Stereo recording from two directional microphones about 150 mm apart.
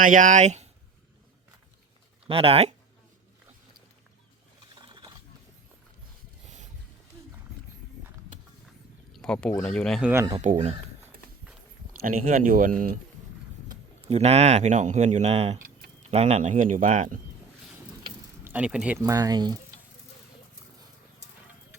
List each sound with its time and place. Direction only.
0.0 s speech: 60° right (ahead or behind)
2.2 s speech: 40° right (ahead or behind)
4.8 s wild animals: 30° right (ahead or behind)
9.1 s speech: 5° left (ahead or behind)
10.0 s speech: 15° right (ahead or behind)
10.3 s speech: 50° right (ahead or behind)
12.0 s speech: 65° right (ahead or behind)
14.1 s speech: 45° right (ahead or behind)
18.4 s speech: 10° right (ahead or behind)
18.9 s speech: 20° right (ahead or behind)